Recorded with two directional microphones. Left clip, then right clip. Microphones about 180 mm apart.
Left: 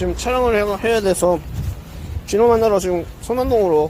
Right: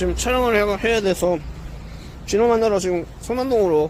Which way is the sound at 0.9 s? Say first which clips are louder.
Left 3 dB; 5° right (ahead or behind).